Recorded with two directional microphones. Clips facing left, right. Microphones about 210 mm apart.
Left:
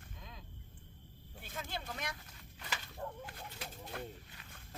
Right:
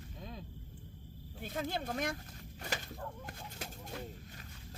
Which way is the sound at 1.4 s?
45° right (ahead or behind).